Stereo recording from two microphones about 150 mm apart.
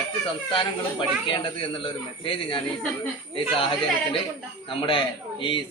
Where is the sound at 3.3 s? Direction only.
35° left (ahead or behind).